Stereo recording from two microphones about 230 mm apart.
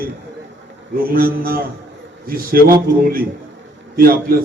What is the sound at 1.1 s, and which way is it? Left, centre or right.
A man's voice, right.